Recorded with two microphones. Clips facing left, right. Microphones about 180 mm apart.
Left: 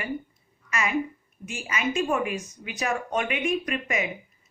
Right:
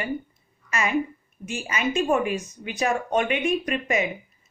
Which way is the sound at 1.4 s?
30° right (ahead or behind).